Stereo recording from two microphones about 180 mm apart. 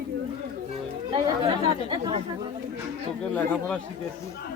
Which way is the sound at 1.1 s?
25° right (ahead or behind).